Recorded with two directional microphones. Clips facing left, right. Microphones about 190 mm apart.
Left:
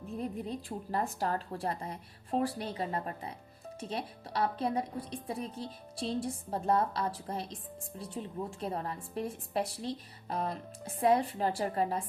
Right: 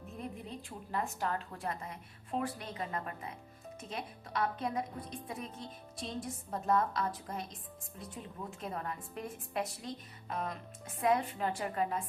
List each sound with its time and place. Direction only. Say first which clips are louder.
0.2 s a woman's voice: left 6 dB; 35° left (ahead or behind)